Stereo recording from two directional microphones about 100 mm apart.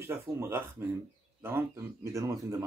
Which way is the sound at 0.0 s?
25° right (ahead or behind).